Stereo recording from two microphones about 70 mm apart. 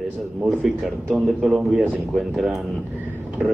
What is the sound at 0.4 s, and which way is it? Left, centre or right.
Speech, centre.